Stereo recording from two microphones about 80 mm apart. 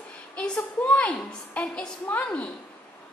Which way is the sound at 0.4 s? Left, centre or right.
Centre.